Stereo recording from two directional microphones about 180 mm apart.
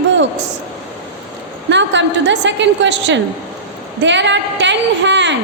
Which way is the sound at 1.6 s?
80° right.